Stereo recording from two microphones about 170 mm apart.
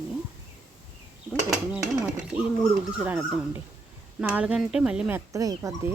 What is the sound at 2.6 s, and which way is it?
Speech, 5° right (ahead or behind).